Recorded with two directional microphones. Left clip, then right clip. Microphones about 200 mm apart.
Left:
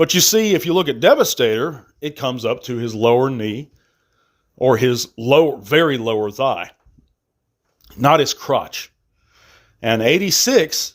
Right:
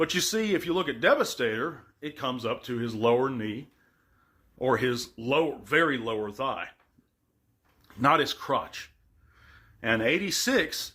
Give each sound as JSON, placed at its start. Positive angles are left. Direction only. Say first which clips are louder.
{"t": 0.0, "sound": "speech", "louder": "left 12 dB", "side_deg": 45}
{"t": 7.8, "sound": "speech", "louder": "left 9 dB", "side_deg": 40}